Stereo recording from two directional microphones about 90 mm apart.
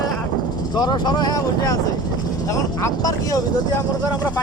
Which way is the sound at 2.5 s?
35° left (ahead or behind).